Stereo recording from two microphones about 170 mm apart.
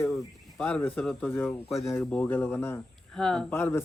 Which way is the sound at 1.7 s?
Centre (ahead or behind).